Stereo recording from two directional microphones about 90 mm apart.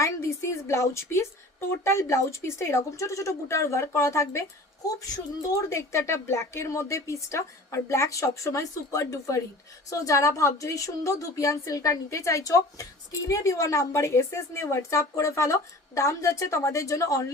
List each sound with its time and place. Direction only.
0.0 s a woman's voice: 35° left (ahead or behind)
5.5 s a woman's voice: 35° left (ahead or behind)